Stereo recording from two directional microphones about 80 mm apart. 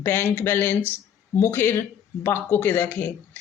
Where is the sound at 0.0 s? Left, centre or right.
Left.